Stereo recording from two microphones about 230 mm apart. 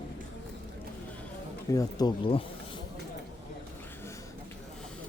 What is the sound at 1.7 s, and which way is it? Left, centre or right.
Speech, centre.